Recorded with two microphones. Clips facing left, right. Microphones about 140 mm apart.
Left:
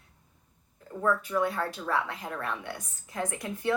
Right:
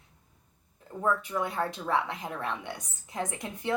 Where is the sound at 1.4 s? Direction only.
20° right (ahead or behind).